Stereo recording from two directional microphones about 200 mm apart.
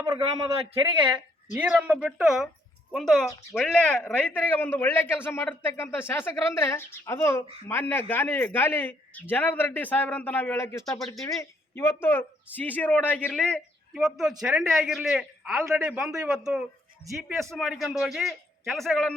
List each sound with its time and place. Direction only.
0.0 s a man's voice: 15° right (ahead or behind); by 10.8 s 15° left (ahead or behind)
11.0 s a man's voice: centre (ahead or behind)
11.3 s a man's voice: 15° left (ahead or behind)